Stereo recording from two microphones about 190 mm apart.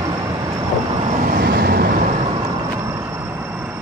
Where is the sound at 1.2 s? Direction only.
45° right (ahead or behind).